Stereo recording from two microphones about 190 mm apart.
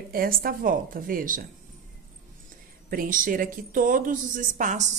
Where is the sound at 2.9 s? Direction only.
45° right (ahead or behind).